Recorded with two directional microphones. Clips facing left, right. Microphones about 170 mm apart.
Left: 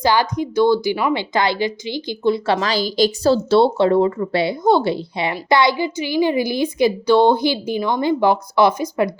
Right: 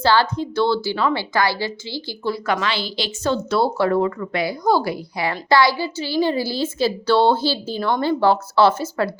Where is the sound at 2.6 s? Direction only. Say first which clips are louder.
Left 7 dB; 40° left (ahead or behind); by 9.1 s 15° left (ahead or behind).